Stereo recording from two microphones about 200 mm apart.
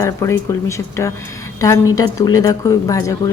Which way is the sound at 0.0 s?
15° left (ahead or behind).